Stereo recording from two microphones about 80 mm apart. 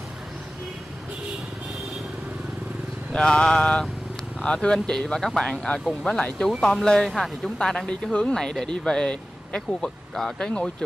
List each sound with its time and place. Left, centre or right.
3.1 s speech: centre
10.1 s speech: centre